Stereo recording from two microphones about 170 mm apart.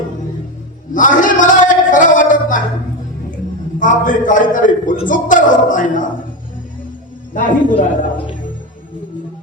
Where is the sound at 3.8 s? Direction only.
50° left (ahead or behind).